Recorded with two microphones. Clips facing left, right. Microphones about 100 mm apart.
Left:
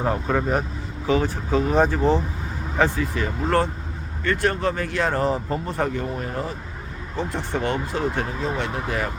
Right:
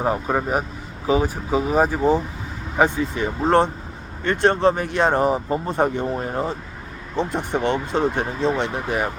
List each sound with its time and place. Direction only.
0.0 s speech: 15° right (ahead or behind)